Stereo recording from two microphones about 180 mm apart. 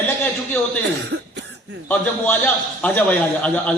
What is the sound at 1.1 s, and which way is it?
Cough, 90° right.